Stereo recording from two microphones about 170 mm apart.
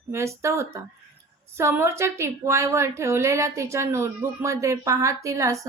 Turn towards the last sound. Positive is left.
turn(degrees=-20)  # may be behind; listen again after turning